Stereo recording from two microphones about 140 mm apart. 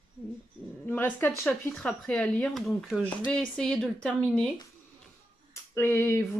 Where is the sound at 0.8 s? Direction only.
15° left (ahead or behind).